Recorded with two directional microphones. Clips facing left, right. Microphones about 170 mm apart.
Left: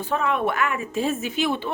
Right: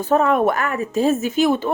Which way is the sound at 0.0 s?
45° right (ahead or behind).